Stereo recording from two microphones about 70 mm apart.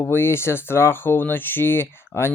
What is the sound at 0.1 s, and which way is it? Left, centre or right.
Speech, left.